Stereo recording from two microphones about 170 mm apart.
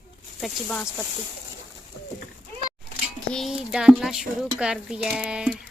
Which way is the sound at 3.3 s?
Centre (ahead or behind).